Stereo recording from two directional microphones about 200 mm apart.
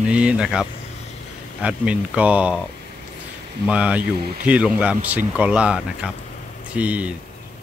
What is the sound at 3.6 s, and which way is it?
Speech, 5° right (ahead or behind).